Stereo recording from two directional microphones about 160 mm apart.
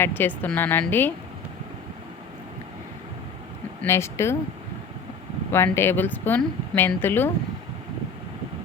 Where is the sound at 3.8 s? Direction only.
15° left (ahead or behind).